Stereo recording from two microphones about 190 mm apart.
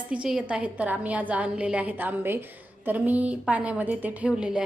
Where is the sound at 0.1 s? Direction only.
5° right (ahead or behind).